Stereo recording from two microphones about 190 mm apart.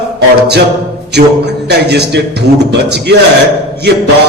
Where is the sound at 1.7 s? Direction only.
60° right (ahead or behind).